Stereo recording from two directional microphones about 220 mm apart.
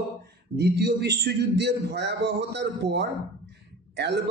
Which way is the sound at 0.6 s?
50° right (ahead or behind).